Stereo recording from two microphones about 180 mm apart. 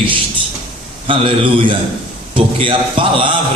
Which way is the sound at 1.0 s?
30° right (ahead or behind).